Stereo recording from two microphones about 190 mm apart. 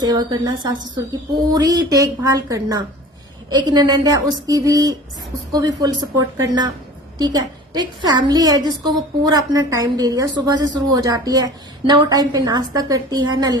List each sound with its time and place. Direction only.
0.0 s a woman's voice: 20° right (ahead or behind)